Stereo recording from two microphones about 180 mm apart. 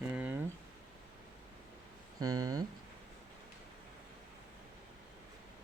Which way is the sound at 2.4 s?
20° right (ahead or behind).